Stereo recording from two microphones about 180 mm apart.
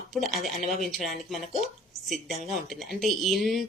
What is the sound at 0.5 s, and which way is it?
Speech, 45° left (ahead or behind).